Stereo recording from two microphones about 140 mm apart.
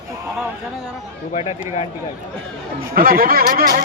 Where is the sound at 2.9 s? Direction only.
90° right.